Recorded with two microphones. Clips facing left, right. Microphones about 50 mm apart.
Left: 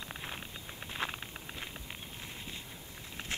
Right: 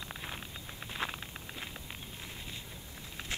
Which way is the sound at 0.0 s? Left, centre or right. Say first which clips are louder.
Even; centre.